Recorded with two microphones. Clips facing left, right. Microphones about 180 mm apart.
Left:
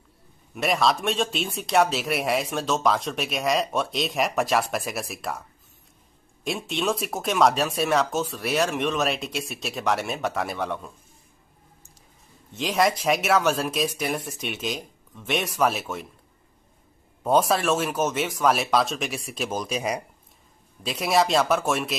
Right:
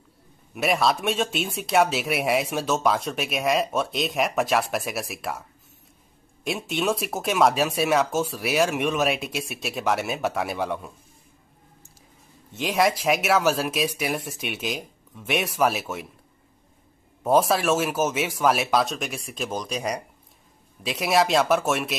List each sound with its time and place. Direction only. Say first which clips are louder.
0.6 s speech: even; 5° right (ahead or behind)
6.4 s speech: right 1 dB; 5° right (ahead or behind)
12.5 s speech: even; centre (ahead or behind)
17.2 s speech: right 1 dB; centre (ahead or behind)